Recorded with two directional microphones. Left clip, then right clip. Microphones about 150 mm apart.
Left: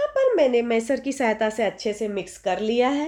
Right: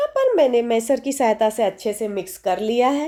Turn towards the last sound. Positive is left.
turn(degrees=-35)  # may be behind; listen again after turning